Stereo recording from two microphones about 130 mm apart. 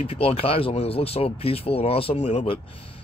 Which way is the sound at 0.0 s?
50° left (ahead or behind).